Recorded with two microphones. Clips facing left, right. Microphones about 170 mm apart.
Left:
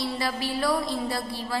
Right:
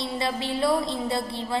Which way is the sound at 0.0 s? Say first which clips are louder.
Right 1 dB; 25° right (ahead or behind).